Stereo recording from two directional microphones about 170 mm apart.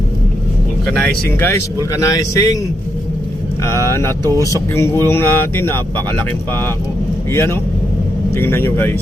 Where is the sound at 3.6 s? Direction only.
15° left (ahead or behind).